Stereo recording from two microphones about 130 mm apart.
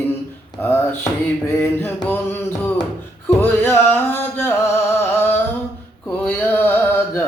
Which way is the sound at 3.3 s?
15° left (ahead or behind).